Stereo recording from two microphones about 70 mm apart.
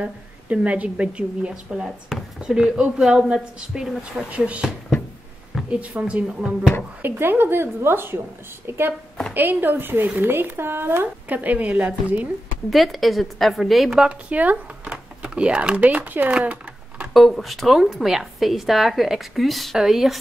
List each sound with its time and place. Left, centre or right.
0.0 s a woman's voice: centre
4.3 s speech: centre
5.7 s speech: centre
7.0 s speech: right
11.2 s a woman's voice: right
12.6 s a woman's voice: centre
14.3 s a woman's voice: right
17.1 s a woman's voice: centre